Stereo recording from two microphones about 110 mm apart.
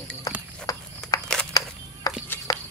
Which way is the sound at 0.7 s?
35° left (ahead or behind).